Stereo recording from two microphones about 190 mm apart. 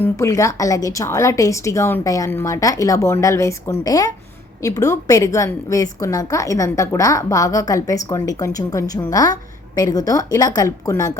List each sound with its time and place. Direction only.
0.0 s a woman's voice: 15° left (ahead or behind)